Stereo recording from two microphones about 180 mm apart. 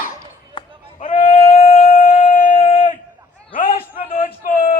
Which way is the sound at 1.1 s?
40° left (ahead or behind).